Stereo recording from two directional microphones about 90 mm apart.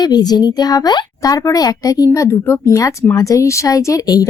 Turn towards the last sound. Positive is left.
turn(degrees=40)  # may be behind; listen again after turning